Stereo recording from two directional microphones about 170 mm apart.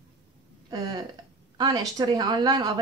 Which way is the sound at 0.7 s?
25° right (ahead or behind).